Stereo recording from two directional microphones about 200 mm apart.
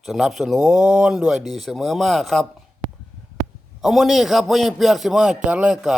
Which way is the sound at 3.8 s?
Centre (ahead or behind).